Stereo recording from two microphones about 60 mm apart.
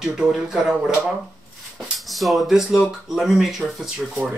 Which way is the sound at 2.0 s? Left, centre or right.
Centre.